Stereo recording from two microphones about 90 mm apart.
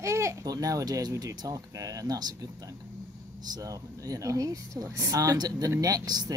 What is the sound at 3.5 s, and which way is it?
A child's voice, 40° right (ahead or behind).